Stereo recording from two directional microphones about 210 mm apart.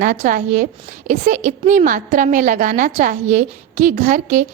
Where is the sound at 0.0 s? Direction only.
40° right (ahead or behind).